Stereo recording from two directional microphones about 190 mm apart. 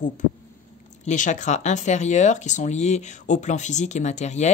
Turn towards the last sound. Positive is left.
turn(degrees=35)  # may be behind; listen again after turning